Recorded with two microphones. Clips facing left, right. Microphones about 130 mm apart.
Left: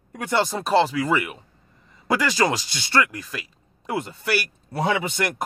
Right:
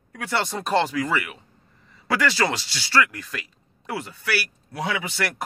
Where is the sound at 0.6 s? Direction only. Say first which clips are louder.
Left 1 dB; 5° left (ahead or behind).